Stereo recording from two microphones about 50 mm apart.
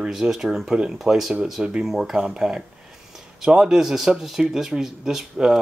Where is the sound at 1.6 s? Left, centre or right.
Centre.